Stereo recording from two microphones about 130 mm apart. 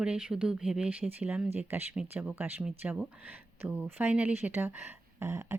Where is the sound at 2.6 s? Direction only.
Centre (ahead or behind).